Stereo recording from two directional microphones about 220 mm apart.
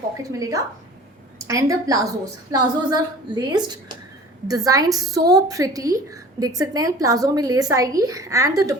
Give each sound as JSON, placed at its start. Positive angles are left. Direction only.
{"t": 0.2, "sound": "a woman's voice", "side_deg": -15}